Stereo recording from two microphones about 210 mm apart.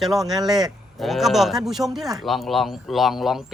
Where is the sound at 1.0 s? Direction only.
Centre (ahead or behind).